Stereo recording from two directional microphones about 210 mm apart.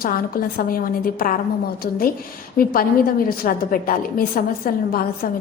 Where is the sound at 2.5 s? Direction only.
45° left (ahead or behind).